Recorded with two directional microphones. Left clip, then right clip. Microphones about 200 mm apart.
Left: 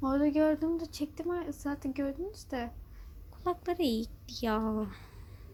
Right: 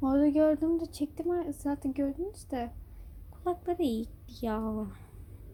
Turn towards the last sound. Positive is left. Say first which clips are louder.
# left 2 dB
turn(degrees=5)  # may be behind; listen again after turning